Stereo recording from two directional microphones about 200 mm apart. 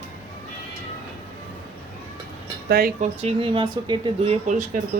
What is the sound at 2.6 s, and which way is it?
Speech, 50° right (ahead or behind).